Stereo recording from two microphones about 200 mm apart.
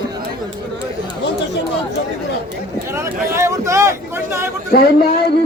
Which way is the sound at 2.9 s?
15° right (ahead or behind).